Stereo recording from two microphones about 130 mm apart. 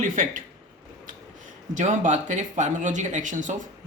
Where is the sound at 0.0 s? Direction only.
80° right.